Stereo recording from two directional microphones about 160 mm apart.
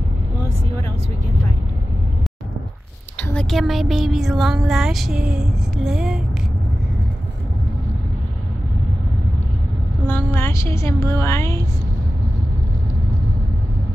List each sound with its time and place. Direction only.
3.2 s speech: 5° left (ahead or behind)
10.0 s a woman's voice: 15° left (ahead or behind)